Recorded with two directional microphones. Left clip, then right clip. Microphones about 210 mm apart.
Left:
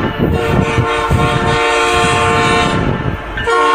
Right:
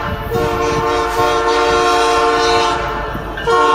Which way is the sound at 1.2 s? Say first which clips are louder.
Right 1 dB; 5° left (ahead or behind).